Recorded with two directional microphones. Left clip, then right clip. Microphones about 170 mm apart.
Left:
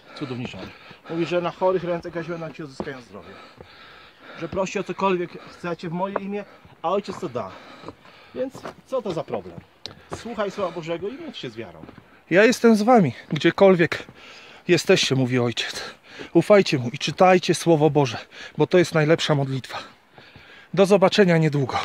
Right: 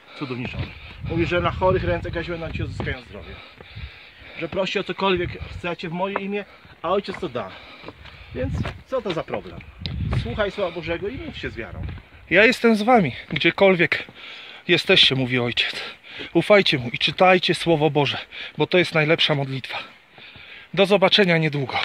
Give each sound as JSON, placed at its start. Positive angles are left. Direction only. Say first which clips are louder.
{"t": 0.2, "sound": "speech", "louder": "right 2 dB", "side_deg": -20}
{"t": 2.8, "sound": "speech", "louder": "right 2 dB", "side_deg": 10}
{"t": 4.4, "sound": "speech", "louder": "right 2 dB", "side_deg": -20}
{"t": 10.0, "sound": "speech", "louder": "right 2 dB", "side_deg": -20}
{"t": 12.3, "sound": "speech", "louder": "even", "side_deg": 25}